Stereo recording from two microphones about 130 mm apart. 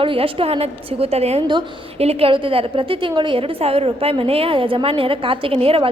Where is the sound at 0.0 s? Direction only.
45° right (ahead or behind).